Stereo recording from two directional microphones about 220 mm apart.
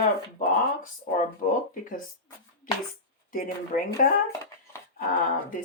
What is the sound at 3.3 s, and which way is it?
Speech, 40° left (ahead or behind).